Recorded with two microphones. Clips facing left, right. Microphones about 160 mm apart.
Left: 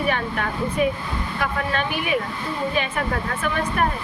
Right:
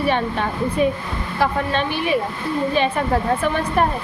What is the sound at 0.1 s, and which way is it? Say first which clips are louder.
A woman's voice: right 4 dB; 30° right (ahead or behind).